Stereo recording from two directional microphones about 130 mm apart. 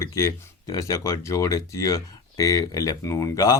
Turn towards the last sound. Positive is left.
turn(degrees=25)  # may be behind; listen again after turning